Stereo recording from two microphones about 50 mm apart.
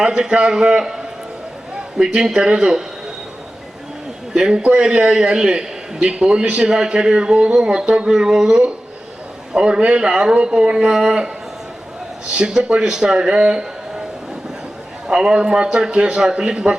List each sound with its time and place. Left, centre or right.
0.0 s a man's voice: centre
2.0 s a man's voice: centre
4.4 s a man's voice: centre
12.6 s a man's voice: centre
15.0 s a man's voice: centre